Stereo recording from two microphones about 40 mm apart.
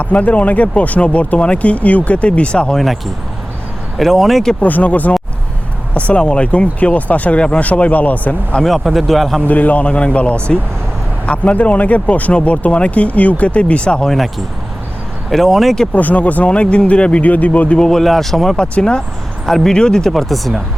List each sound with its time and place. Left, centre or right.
0.0 s speech: left
2.7 s a man's voice: centre
4.6 s speech: left
7.6 s speech: left
8.6 s a man's voice: centre
9.5 s speech: left
9.8 s speech: left
14.1 s a man's voice: centre
16.0 s speech: left
17.7 s speech: centre
18.8 s speech: left
19.5 s speech: centre
19.7 s speech: centre
20.1 s a man's voice: centre